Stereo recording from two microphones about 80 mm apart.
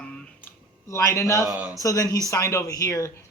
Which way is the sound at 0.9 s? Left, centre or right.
Left.